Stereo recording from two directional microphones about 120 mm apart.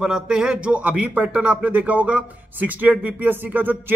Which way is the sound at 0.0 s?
5° right (ahead or behind).